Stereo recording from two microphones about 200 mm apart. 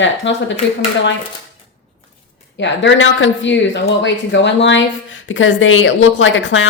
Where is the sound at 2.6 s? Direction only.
65° left (ahead or behind).